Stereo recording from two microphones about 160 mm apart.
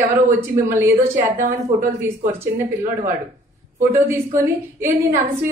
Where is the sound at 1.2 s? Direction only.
50° right (ahead or behind).